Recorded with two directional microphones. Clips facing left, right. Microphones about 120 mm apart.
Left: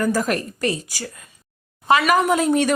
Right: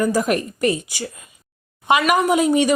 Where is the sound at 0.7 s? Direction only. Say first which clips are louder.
Right 4 dB; 40° left (ahead or behind).